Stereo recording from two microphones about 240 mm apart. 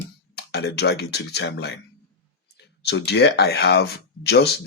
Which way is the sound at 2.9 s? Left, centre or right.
Left.